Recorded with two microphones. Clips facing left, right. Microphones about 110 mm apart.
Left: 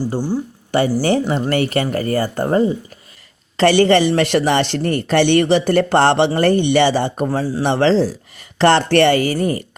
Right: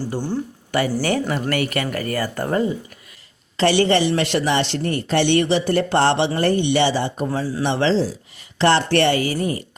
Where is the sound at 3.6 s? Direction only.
50° left (ahead or behind).